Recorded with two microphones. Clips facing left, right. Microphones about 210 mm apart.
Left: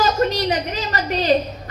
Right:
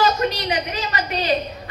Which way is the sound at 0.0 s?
40° left (ahead or behind).